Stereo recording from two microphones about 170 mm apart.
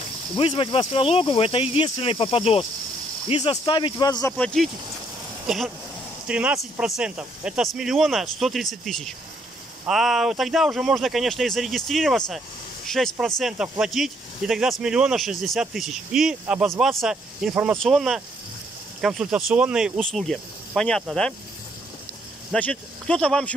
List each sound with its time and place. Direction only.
0.4 s speech: 30° left (ahead or behind)
4.3 s speech: 5° left (ahead or behind)
22.5 s speech: 5° left (ahead or behind)